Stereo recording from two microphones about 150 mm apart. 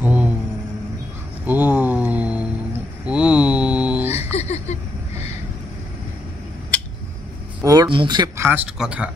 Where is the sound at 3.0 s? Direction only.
5° right (ahead or behind).